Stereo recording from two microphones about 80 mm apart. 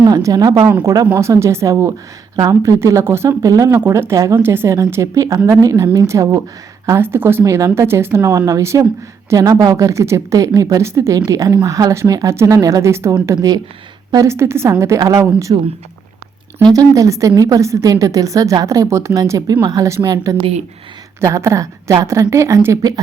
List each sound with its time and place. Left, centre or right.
0.2 s speech: right
2.7 s speech: right
3.4 s speech: right
3.8 s speech: right
8.3 s speech: right
9.3 s speech: right
9.7 s speech: right
11.3 s speech: right
13.2 s speech: right
14.3 s speech: right
16.7 s speech: right
22.8 s speech: right